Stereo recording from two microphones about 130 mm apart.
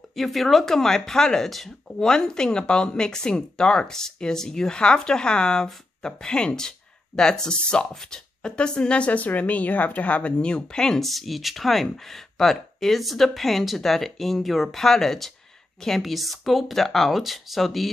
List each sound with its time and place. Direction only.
0.1 s speech: centre (ahead or behind)